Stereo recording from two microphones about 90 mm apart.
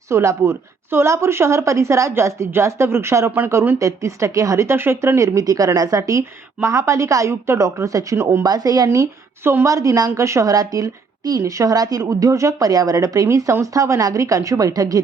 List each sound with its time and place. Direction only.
0.1 s speech: 35° right (ahead or behind)
8.4 s speech: 45° right (ahead or behind)